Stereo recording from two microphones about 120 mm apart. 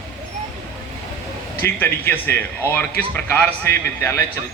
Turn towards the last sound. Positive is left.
turn(degrees=20)  # may be behind; listen again after turning